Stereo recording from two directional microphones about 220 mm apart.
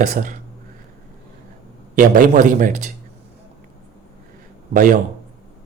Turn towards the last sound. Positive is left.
turn(degrees=-35)  # may be behind; listen again after turning